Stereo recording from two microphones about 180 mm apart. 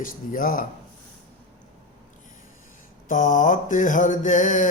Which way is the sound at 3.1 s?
45° left (ahead or behind).